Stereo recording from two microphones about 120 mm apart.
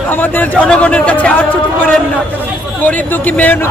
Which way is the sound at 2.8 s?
15° left (ahead or behind).